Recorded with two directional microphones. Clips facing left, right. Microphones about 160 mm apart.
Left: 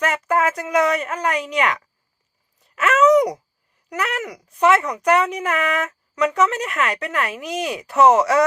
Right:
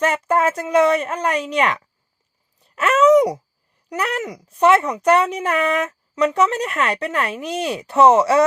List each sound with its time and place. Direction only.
0.0 s speech: 30° right (ahead or behind)